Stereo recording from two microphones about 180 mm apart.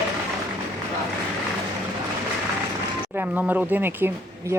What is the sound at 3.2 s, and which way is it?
Speech, 5° right (ahead or behind).